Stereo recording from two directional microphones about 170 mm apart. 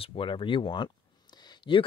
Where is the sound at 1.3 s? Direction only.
25° left (ahead or behind).